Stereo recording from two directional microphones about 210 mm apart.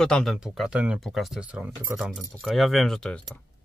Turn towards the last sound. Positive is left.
turn(degrees=5)  # may be behind; listen again after turning